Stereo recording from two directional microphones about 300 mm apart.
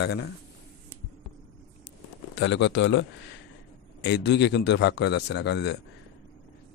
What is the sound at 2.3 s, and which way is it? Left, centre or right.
A man's voice, left.